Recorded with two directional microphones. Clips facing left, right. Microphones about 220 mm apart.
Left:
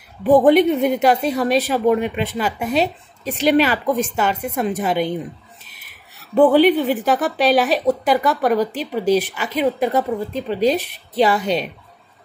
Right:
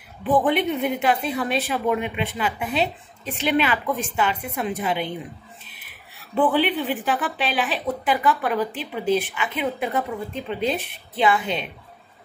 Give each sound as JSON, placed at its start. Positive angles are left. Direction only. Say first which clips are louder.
{"t": 0.2, "sound": "a woman's voice", "louder": "left 8 dB", "side_deg": 40}
{"t": 6.3, "sound": "a woman's voice", "louder": "left 8 dB", "side_deg": 40}